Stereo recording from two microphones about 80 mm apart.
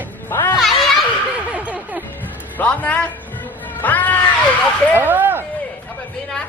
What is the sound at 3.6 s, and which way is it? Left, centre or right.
Cat, left.